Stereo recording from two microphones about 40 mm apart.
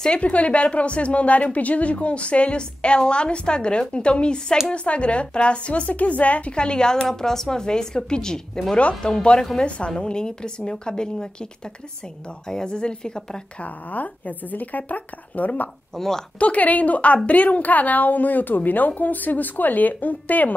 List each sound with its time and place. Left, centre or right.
0.2 s a woman's voice: left
6.5 s a woman's voice: left
8.7 s a woman's voice: left
12.4 s a woman's voice: centre
13.6 s a woman's voice: left
16.0 s a woman's voice: centre
16.3 s a woman's voice: left